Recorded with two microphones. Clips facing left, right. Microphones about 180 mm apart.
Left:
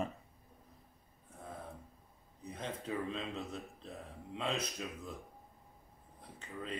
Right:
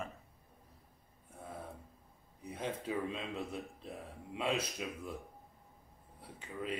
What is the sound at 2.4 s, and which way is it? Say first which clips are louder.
Speech: right 3 dB; 10° right (ahead or behind).